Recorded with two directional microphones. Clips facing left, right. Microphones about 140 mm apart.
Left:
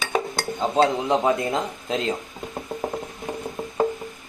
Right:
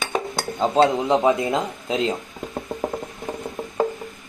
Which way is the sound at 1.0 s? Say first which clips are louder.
Right 3 dB; 20° right (ahead or behind).